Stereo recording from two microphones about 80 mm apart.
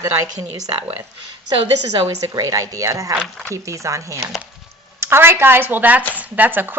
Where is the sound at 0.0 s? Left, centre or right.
Right.